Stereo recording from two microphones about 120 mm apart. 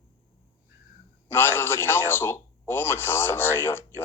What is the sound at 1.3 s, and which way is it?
A man's voice, 20° left (ahead or behind).